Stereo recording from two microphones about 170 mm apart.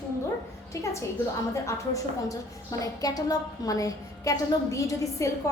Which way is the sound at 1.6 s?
20° left (ahead or behind).